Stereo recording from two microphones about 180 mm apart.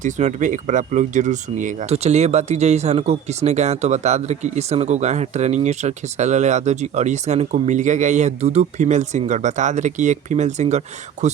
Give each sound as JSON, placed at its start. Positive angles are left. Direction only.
{"t": 0.0, "sound": "speech", "side_deg": -45}